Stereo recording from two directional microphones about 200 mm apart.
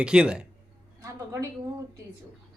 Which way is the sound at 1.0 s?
15° right (ahead or behind).